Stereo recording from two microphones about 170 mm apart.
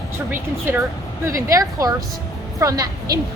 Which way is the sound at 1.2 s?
20° right (ahead or behind).